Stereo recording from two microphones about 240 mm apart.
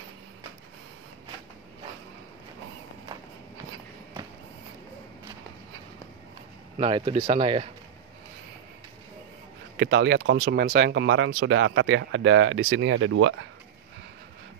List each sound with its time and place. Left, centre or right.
6.8 s speech: right
9.8 s speech: right